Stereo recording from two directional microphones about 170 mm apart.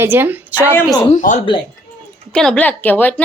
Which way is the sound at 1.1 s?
45° left (ahead or behind).